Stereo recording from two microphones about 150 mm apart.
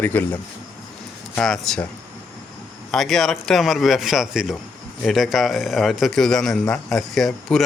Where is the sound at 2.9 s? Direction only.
Centre (ahead or behind).